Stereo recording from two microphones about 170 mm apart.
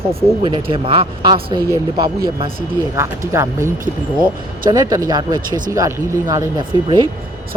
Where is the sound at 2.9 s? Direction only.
15° right (ahead or behind).